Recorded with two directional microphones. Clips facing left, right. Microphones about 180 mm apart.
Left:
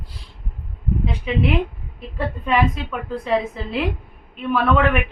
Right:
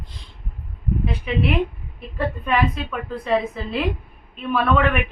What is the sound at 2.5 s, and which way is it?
A woman's voice, 15° left (ahead or behind).